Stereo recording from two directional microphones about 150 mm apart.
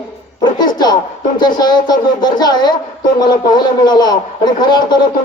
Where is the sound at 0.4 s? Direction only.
30° left (ahead or behind).